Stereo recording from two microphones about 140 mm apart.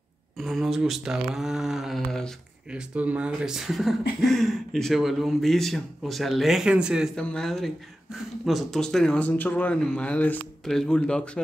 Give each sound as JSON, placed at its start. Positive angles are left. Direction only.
{"t": 0.4, "sound": "speech", "side_deg": 0}
{"t": 7.2, "sound": "speech", "side_deg": 5}